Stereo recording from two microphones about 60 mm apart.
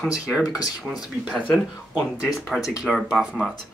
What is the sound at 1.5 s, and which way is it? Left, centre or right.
Speech, centre.